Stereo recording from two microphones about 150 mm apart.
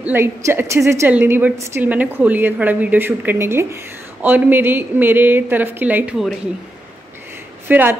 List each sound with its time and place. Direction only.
0.0 s a woman's voice: 15° right (ahead or behind)
7.6 s a woman's voice: 15° right (ahead or behind)